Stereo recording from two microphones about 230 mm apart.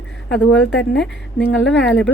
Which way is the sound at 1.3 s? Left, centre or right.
Left.